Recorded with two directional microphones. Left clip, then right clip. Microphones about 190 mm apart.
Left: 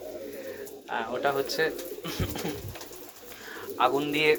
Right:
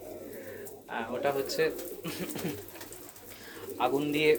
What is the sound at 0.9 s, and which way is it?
Speech, 15° right (ahead or behind).